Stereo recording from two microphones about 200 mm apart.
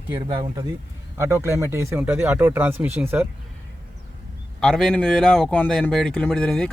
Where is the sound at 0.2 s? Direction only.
25° right (ahead or behind).